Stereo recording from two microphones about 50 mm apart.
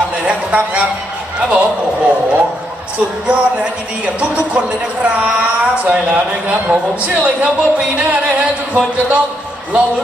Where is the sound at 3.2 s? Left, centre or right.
Right.